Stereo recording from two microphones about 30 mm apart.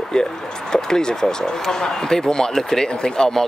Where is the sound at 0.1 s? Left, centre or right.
Left.